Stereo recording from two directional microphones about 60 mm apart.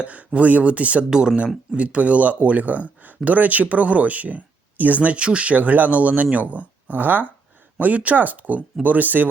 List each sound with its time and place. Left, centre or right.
0.0 s speech: right